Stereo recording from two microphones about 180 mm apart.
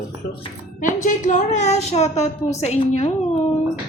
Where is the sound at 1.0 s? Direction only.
45° left (ahead or behind).